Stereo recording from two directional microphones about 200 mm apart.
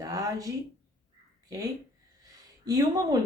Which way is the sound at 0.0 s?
15° right (ahead or behind).